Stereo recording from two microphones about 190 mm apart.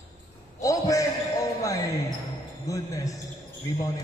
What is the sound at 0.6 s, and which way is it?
Basketball bounce, 15° left (ahead or behind).